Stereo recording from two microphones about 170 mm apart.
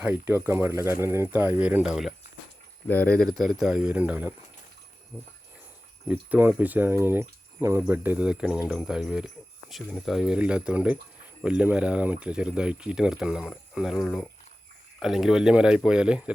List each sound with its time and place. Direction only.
0.0 s speech: 10° right (ahead or behind)
2.8 s speech: 10° left (ahead or behind); by 4.4 s 10° right (ahead or behind)
6.1 s speech: 10° right (ahead or behind)